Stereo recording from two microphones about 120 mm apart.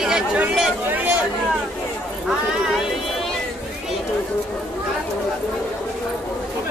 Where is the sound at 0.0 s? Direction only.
5° right (ahead or behind).